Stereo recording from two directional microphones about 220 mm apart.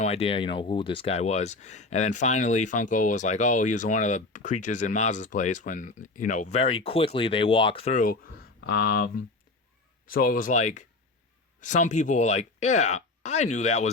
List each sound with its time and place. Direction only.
0.0 s speech: 25° left (ahead or behind)